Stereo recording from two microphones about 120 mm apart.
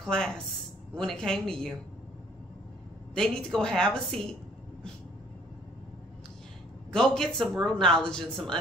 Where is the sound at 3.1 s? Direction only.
5° left (ahead or behind).